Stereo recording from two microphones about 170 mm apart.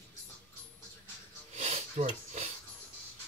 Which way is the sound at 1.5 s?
40° right (ahead or behind).